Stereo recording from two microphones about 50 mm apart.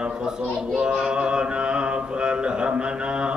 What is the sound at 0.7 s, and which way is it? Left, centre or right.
Mantra, centre.